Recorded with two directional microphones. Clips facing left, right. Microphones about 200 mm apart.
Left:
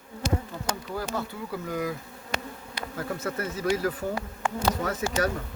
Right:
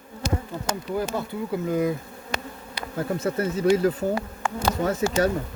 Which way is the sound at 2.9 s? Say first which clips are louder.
Right 6 dB; 30° right (ahead or behind).